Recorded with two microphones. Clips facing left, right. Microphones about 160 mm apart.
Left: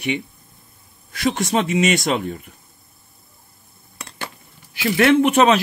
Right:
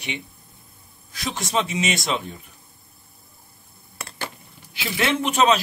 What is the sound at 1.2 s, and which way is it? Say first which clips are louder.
Speech: left 6 dB; 60° left (ahead or behind).